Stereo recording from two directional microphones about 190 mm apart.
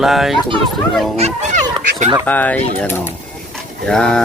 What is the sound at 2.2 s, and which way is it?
Speech, 10° left (ahead or behind).